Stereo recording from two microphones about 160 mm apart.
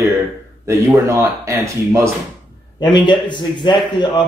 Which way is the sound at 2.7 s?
30° left (ahead or behind).